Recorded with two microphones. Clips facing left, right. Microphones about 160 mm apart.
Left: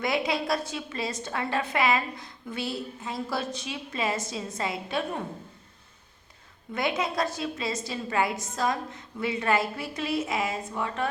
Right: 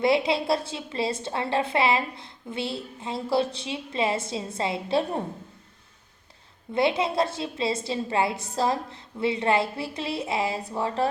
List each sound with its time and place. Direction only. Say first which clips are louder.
0.0 s a woman's voice: right 5 dB; 30° right (ahead or behind)
6.7 s a woman's voice: right 5 dB; 30° right (ahead or behind)